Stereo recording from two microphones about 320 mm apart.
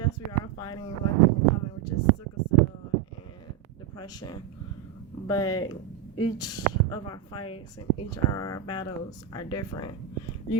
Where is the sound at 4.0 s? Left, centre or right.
Centre.